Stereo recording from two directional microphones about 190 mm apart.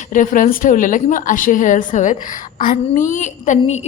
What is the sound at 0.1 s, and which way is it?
A woman's voice, 45° left (ahead or behind).